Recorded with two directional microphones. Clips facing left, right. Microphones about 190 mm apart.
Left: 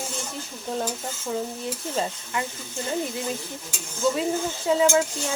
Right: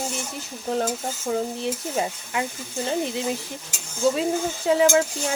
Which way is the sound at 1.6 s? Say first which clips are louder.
Right 2 dB; 15° right (ahead or behind).